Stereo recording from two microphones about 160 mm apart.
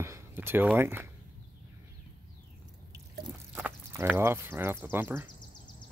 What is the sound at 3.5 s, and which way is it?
Speech, 10° right (ahead or behind).